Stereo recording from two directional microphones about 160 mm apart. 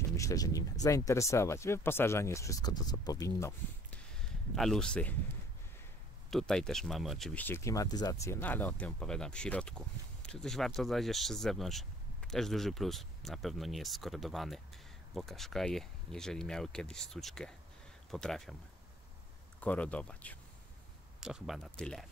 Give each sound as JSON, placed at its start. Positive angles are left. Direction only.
{"t": 0.1, "sound": "speech", "side_deg": 20}
{"t": 4.6, "sound": "speech", "side_deg": 5}
{"t": 6.3, "sound": "speech", "side_deg": 5}
{"t": 7.4, "sound": "speech", "side_deg": 15}
{"t": 19.6, "sound": "speech", "side_deg": 10}
{"t": 21.2, "sound": "speech", "side_deg": -5}